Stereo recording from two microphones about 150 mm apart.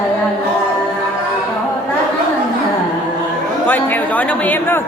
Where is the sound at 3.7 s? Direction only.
10° left (ahead or behind).